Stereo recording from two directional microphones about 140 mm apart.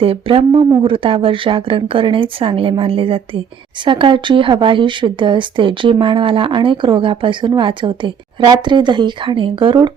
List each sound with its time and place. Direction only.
0.0 s a woman's voice: 40° right (ahead or behind)